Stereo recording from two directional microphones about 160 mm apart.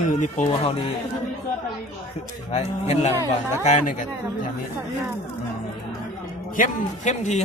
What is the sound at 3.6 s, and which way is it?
Speech, 50° left (ahead or behind).